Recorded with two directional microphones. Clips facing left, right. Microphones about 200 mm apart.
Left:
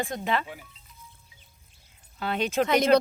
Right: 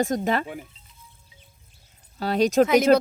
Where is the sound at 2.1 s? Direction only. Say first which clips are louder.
Right 7 dB; 40° right (ahead or behind).